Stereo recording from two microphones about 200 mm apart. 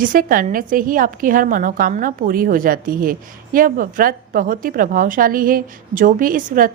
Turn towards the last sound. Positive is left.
turn(degrees=-40)  # may be behind; listen again after turning